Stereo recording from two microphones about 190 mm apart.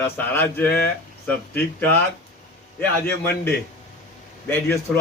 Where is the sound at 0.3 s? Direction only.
10° left (ahead or behind).